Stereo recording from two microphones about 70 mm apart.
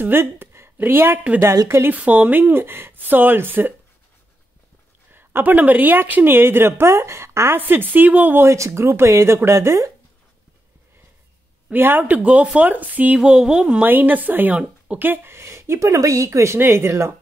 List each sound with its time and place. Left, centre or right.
0.0 s a woman's voice: right
5.1 s a woman's voice: right
8.5 s speech: right
11.7 s a woman's voice: right
12.0 s a woman's voice: centre; by 17.1 s right